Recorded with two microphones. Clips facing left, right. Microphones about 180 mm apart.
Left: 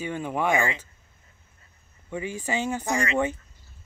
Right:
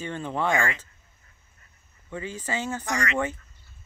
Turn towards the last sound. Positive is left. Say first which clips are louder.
# left 3 dB
turn(degrees=15)  # may be behind; listen again after turning